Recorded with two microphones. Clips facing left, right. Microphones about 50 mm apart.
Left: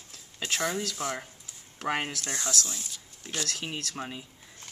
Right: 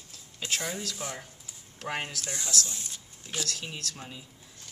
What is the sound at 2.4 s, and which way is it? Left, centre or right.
Speech, left.